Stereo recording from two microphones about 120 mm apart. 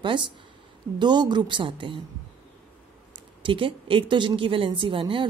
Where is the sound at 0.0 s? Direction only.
40° right (ahead or behind).